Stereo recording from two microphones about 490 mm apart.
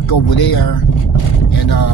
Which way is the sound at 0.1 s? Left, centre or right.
Left.